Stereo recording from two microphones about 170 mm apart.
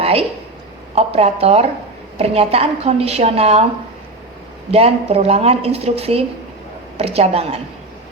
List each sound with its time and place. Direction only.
0.0 s a sound: 35° right (ahead or behind)
0.9 s a woman's voice: 35° right (ahead or behind)
4.7 s a woman's voice: 35° right (ahead or behind)